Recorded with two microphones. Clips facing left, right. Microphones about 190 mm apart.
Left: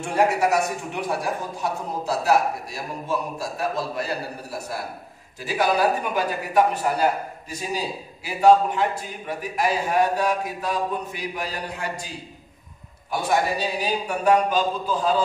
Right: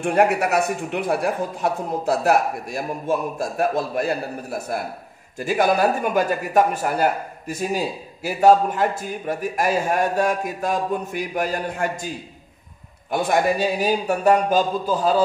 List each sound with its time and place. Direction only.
0.0 s a man's voice: 60° right (ahead or behind)
13.1 s speech: 55° right (ahead or behind)